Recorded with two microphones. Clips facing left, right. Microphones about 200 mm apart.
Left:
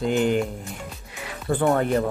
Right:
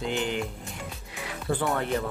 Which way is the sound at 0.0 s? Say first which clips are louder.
Left 8 dB; 45° left (ahead or behind).